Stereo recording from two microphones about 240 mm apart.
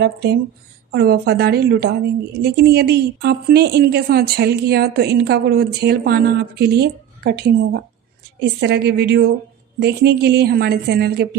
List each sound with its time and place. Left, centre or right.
0.0 s a woman's voice: right